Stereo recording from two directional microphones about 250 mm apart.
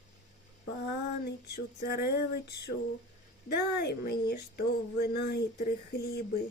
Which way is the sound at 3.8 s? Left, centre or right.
Left.